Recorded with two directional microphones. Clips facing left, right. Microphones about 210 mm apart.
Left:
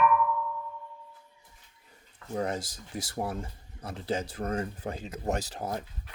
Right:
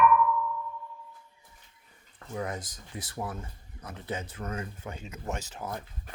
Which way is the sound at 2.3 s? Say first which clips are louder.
Left 4 dB; 35° left (ahead or behind).